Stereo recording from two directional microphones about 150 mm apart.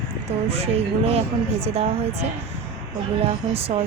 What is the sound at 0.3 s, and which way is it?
Speech, 40° right (ahead or behind).